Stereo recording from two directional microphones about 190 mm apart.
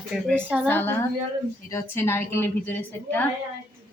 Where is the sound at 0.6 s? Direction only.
10° left (ahead or behind).